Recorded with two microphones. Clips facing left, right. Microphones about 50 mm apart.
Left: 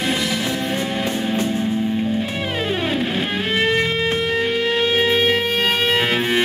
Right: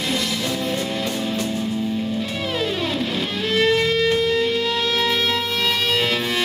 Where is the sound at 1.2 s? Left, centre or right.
Left.